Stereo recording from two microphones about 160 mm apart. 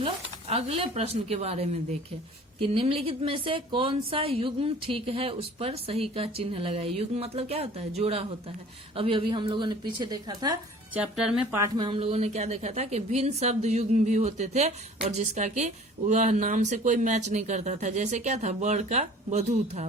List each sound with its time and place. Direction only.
0.0 s a woman's voice: 40° right (ahead or behind)
10.9 s speech: 5° right (ahead or behind)
11.8 s a woman's voice: 35° right (ahead or behind)